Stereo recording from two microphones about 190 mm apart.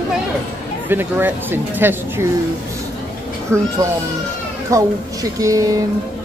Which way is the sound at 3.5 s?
15° right (ahead or behind).